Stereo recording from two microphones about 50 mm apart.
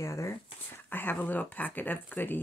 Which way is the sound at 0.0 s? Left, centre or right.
Left.